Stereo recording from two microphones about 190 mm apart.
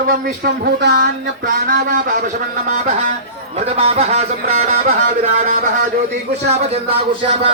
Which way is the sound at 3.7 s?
35° right (ahead or behind).